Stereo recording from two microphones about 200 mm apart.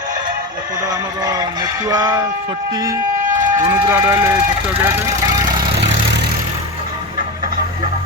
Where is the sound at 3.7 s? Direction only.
10° right (ahead or behind).